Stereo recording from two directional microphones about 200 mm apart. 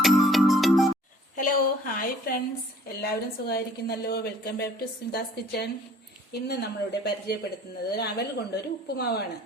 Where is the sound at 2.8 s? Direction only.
50° left (ahead or behind).